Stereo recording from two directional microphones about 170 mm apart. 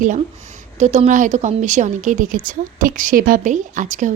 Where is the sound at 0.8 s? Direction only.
45° right (ahead or behind).